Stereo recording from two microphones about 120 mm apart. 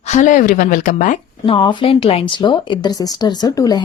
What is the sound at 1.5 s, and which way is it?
Speech, 50° left (ahead or behind).